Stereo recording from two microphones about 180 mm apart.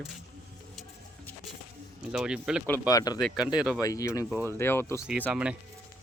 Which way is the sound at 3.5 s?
5° right (ahead or behind).